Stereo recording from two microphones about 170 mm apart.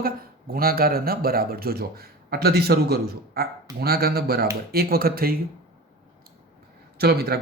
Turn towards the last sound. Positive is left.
turn(degrees=-70)  # may be behind; listen again after turning